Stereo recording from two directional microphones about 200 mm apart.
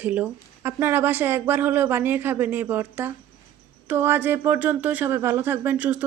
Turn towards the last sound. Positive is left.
turn(degrees=-10)  # may be behind; listen again after turning